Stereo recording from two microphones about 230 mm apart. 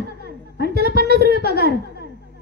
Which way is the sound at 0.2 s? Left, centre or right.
Right.